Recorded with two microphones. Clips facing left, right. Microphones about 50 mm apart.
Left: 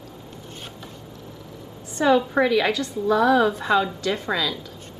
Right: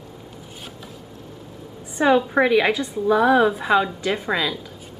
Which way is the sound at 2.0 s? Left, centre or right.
Right.